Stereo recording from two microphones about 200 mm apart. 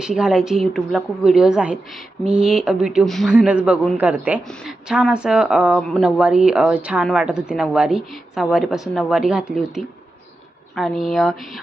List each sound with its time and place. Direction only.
0.0 s speech: 5° right (ahead or behind)